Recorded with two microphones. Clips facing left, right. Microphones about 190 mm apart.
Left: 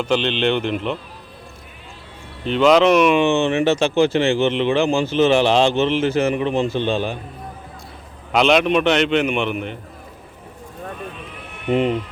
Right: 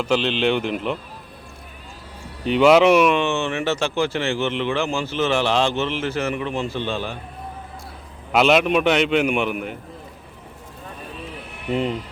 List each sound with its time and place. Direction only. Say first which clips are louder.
0.0 s a man's voice: left 1 dB; 5° right (ahead or behind)
2.4 s a man's voice: even; 10° right (ahead or behind)
3.1 s speech: left 5 dB; 15° left (ahead or behind)
8.3 s a man's voice: left 1 dB; 5° right (ahead or behind)